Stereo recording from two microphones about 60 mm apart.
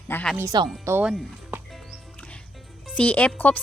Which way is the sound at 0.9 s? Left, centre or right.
Right.